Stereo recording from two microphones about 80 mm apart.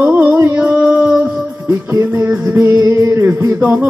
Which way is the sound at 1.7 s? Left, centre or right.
Right.